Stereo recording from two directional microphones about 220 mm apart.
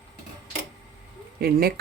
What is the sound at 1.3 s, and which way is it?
Speech, 45° right (ahead or behind).